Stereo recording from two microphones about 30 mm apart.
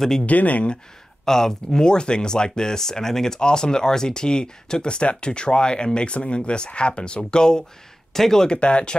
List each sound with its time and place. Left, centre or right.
0.3 s speech: left
1.2 s speech: centre; by 7.2 s left
7.2 s speech: left
8.1 s speech: centre
8.5 s speech: left